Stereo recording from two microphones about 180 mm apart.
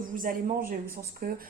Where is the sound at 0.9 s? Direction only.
55° right (ahead or behind).